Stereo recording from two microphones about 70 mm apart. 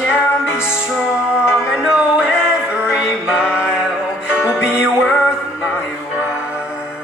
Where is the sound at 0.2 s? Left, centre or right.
Left.